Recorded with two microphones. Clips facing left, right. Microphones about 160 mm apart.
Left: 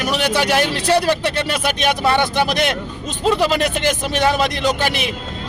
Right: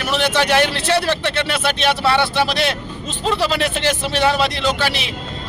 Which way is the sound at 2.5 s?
50° left (ahead or behind).